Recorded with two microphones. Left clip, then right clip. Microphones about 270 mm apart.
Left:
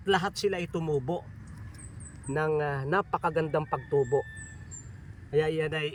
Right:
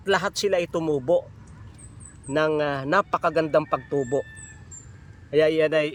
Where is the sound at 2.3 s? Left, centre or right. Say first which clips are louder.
Right 6 dB; right.